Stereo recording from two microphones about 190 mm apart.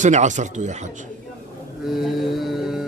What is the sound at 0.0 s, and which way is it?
Speech, 40° right (ahead or behind).